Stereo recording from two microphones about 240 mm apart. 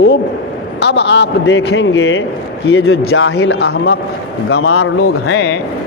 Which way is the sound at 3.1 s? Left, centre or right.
Left.